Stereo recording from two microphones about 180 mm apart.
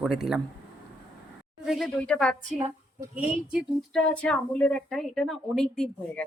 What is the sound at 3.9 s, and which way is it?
A woman's voice, 5° left (ahead or behind).